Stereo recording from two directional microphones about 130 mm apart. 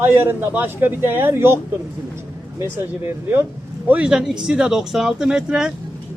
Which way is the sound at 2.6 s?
20° right (ahead or behind).